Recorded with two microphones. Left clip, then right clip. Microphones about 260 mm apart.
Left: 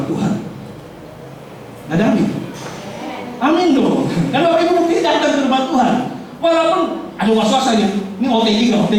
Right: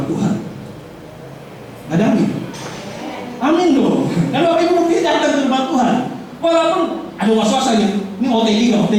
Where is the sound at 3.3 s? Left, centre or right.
Centre.